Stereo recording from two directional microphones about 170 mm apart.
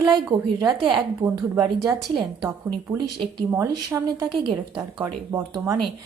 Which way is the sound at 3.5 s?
15° right (ahead or behind).